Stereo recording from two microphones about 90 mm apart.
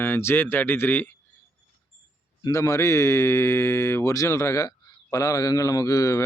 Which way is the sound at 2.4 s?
40° left (ahead or behind).